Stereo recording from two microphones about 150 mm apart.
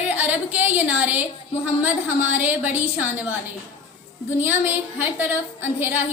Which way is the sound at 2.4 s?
10° right (ahead or behind).